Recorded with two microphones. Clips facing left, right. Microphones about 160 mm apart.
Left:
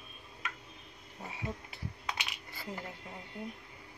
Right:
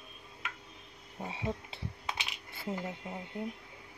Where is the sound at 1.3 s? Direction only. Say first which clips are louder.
Right 4 dB; 25° right (ahead or behind).